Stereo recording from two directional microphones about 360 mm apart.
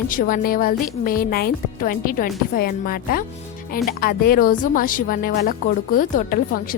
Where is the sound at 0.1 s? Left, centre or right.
Left.